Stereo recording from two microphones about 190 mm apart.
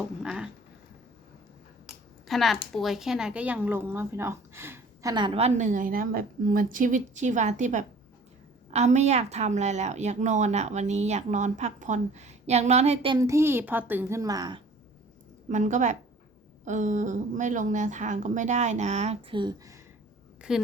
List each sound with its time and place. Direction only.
0.2 s a sound: 5° right (ahead or behind)
2.2 s speech: centre (ahead or behind)
5.1 s a woman's voice: 25° right (ahead or behind)
13.1 s speech: 15° right (ahead or behind)
15.4 s a woman's voice: 40° right (ahead or behind); by 19.8 s 20° right (ahead or behind)
20.4 s a woman's voice: 5° right (ahead or behind)